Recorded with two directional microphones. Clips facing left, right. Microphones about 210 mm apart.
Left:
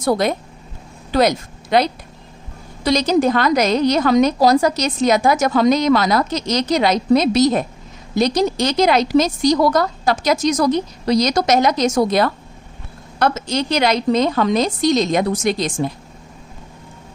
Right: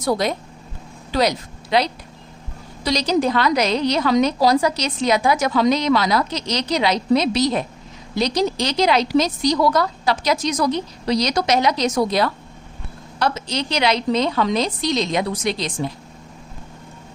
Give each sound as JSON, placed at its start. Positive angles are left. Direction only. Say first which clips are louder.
{"t": 0.0, "sound": "a woman's voice", "louder": "left 3 dB", "side_deg": 50}